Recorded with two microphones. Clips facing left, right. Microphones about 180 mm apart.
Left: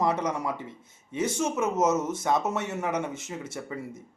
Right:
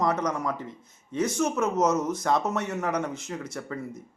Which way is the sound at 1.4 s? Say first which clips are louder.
Right 2 dB; 5° left (ahead or behind).